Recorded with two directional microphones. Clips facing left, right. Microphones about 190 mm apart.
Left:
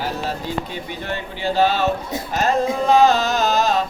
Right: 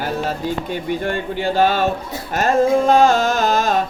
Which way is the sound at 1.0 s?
50° right (ahead or behind).